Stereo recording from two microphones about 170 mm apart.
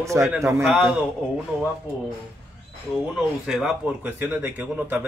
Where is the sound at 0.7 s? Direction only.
5° right (ahead or behind).